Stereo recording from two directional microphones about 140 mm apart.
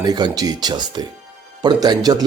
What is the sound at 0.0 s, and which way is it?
Speech, 30° right (ahead or behind).